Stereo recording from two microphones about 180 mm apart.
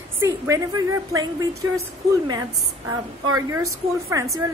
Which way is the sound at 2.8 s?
15° right (ahead or behind).